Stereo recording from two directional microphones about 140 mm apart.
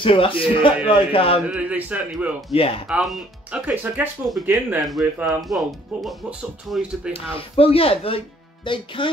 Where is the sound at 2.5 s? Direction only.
45° left (ahead or behind).